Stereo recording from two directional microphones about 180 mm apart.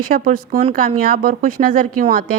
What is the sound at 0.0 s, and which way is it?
Speech, 50° right (ahead or behind).